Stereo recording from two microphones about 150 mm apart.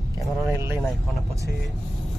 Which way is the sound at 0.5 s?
15° right (ahead or behind).